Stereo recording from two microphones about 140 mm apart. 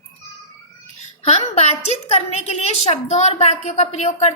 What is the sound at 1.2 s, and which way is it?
A woman's voice, 50° left (ahead or behind).